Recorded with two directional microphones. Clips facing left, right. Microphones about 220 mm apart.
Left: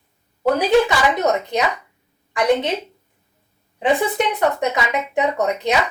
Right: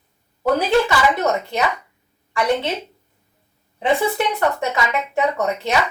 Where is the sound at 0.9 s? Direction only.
15° left (ahead or behind).